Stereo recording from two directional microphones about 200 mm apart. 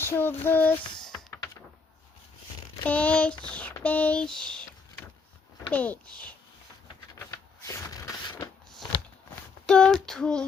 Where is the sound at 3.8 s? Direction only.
5° left (ahead or behind).